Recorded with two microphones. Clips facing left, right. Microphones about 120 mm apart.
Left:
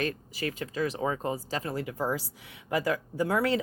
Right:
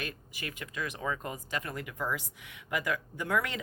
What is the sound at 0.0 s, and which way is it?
Speech, 35° left (ahead or behind).